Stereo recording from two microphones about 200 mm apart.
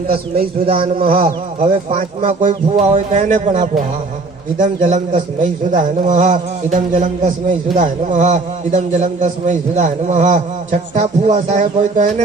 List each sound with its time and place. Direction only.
0.7 s a man's voice: 25° right (ahead or behind)